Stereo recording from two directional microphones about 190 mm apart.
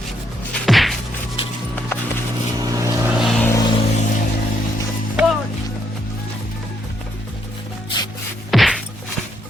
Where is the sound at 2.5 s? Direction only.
20° right (ahead or behind).